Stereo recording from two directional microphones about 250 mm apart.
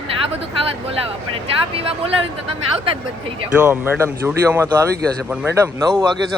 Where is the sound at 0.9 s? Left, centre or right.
Right.